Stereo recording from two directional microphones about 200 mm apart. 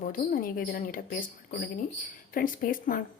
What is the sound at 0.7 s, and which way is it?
Speech, 45° left (ahead or behind).